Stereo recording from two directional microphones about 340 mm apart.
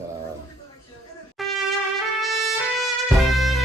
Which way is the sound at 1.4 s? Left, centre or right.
Centre.